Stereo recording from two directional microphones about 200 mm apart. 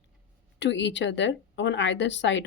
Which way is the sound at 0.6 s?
60° left (ahead or behind).